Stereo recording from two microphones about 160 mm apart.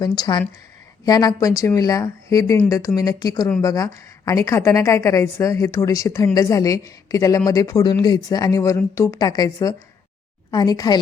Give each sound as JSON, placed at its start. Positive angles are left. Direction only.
{"t": 0.0, "sound": "a woman's voice", "side_deg": 25}